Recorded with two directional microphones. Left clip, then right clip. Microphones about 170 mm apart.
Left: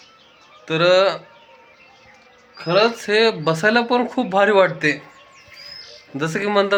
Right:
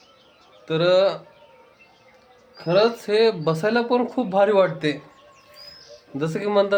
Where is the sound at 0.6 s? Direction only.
Centre (ahead or behind).